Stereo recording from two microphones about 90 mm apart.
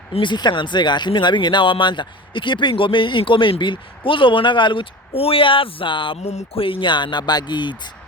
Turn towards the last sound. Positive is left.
turn(degrees=60)  # may be behind; listen again after turning